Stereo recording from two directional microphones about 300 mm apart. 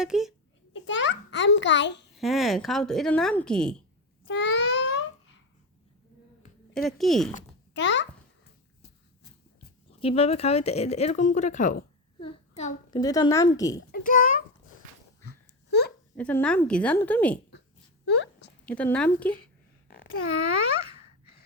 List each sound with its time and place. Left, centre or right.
0.0 s speech: centre
0.7 s a child's voice: left
2.1 s speech: centre
4.3 s a sound: left
6.7 s speech: centre
7.7 s a child's voice: left
10.0 s a child's voice: centre
13.9 s a child's voice: left
16.1 s speech: centre
18.1 s a sound: left
18.6 s speech: centre
19.9 s a sound: left